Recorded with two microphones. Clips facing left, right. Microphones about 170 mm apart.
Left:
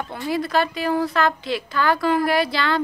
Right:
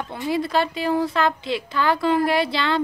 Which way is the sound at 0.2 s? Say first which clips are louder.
Even; 25° right (ahead or behind).